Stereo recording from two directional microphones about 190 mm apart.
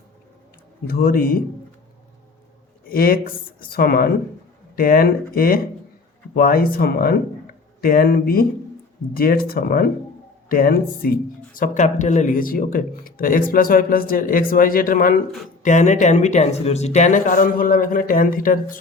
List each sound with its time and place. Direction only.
0.9 s speech: 50° left (ahead or behind)
2.8 s speech: 50° left (ahead or behind)